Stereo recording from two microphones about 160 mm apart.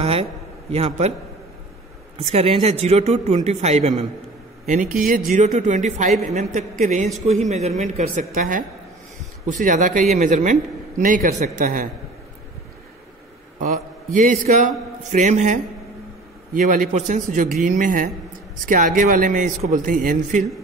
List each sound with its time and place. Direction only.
0.0 s a sound: 40° right (ahead or behind)
2.1 s speech: 35° right (ahead or behind)
4.6 s a man's voice: 55° right (ahead or behind)
8.4 s a man's voice: 60° right (ahead or behind)
13.6 s a man's voice: 55° right (ahead or behind)